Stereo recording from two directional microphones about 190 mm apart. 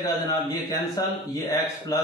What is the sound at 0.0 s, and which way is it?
A man's voice, 20° left (ahead or behind).